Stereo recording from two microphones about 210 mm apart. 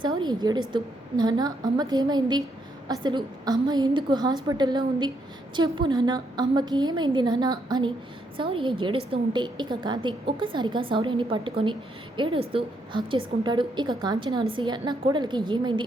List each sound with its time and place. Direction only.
0.0 s a woman's voice: 20° right (ahead or behind)